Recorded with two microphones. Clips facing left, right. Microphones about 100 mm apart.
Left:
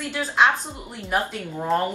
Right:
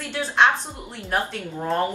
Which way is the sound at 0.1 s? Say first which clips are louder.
Right 1 dB; 5° left (ahead or behind).